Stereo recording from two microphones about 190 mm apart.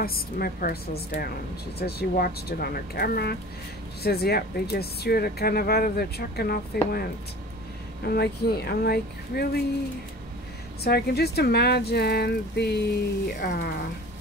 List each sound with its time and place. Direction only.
0.0 s a woman's voice: 50° left (ahead or behind)
10.8 s a woman's voice: 55° left (ahead or behind)